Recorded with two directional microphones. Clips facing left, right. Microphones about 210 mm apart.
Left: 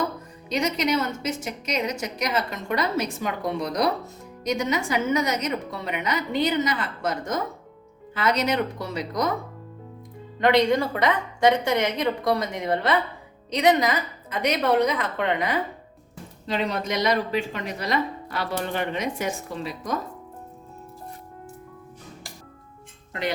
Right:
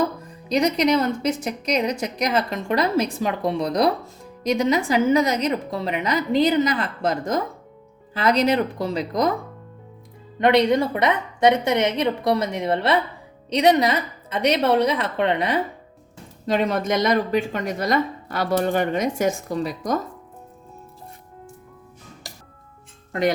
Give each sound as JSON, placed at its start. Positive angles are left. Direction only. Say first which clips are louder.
{"t": 0.4, "sound": "a woman's voice", "louder": "right 5 dB", "side_deg": -35}
{"t": 10.4, "sound": "a woman's voice", "louder": "right 2 dB", "side_deg": -20}
{"t": 16.5, "sound": "speech", "louder": "right 5 dB", "side_deg": -50}